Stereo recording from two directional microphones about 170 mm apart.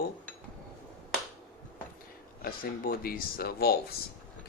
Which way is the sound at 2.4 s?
55° left (ahead or behind).